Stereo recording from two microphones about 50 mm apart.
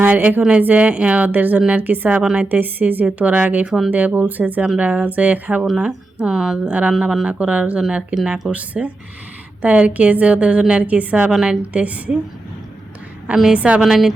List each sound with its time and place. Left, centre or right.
0.0 s a woman's voice: right
2.2 s a woman's voice: right
2.5 s a woman's voice: right
3.7 s a woman's voice: centre
3.9 s a woman's voice: right
5.8 s speech: centre
6.7 s a woman's voice: right
6.9 s speech: centre
7.3 s a woman's voice: right
10.8 s a woman's voice: right
11.3 s a woman's voice: centre
11.6 s a woman's voice: right
13.5 s a woman's voice: right
13.8 s speech: centre